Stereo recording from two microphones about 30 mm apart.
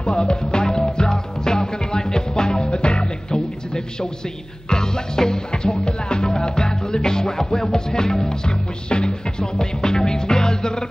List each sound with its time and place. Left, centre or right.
0.0 s music: left